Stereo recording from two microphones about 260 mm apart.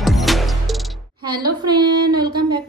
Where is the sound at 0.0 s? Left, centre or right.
Centre.